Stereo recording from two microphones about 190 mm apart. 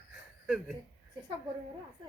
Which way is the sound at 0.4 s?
5° right (ahead or behind).